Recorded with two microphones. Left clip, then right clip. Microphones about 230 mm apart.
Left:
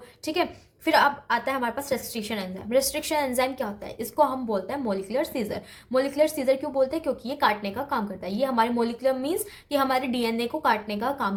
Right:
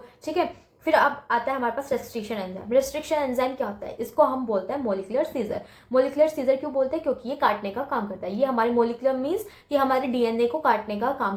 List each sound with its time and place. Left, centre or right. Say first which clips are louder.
0.3 s a woman's voice: right 1 dB; left